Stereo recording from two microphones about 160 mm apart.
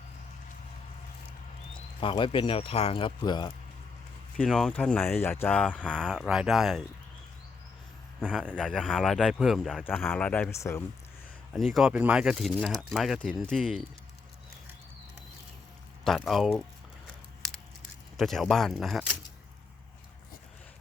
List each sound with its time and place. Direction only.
1.7 s speech: 30° left (ahead or behind)
4.4 s speech: 5° left (ahead or behind)
8.3 s speech: 5° left (ahead or behind)
9.8 s speech: 10° left (ahead or behind)
11.5 s speech: centre (ahead or behind)
16.0 s speech: centre (ahead or behind)
18.2 s speech: centre (ahead or behind)